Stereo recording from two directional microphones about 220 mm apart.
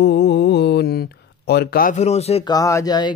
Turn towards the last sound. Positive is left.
turn(degrees=20)  # may be behind; listen again after turning